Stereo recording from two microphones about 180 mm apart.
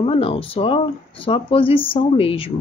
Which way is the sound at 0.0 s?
30° left (ahead or behind).